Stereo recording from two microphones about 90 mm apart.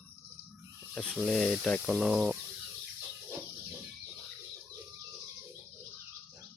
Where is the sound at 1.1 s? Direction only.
Centre (ahead or behind).